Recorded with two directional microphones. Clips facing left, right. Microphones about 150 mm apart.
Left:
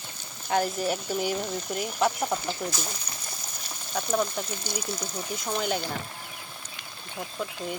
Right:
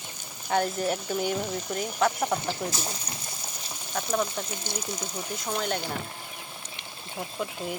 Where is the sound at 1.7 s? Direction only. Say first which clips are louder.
Even; 5° left (ahead or behind).